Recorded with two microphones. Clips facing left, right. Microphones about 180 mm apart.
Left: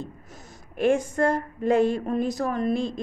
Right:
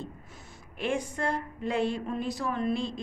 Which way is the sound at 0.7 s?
45° left (ahead or behind).